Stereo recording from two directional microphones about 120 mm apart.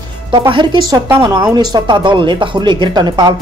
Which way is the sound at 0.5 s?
40° right (ahead or behind).